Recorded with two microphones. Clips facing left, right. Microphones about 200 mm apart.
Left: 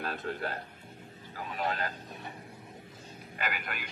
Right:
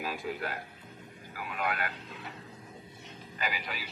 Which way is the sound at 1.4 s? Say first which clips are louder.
Left 1 dB; 40° left (ahead or behind).